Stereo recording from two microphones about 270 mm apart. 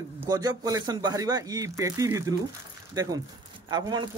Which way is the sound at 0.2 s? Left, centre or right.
Centre.